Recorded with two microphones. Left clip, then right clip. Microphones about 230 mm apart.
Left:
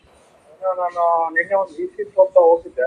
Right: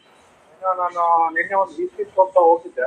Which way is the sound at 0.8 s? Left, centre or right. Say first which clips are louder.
Right 1 dB; right.